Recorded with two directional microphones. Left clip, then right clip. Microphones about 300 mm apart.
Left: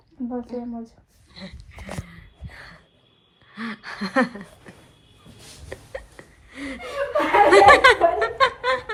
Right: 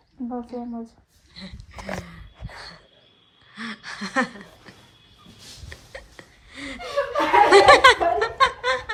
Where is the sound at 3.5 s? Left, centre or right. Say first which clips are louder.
Left 1 dB; centre.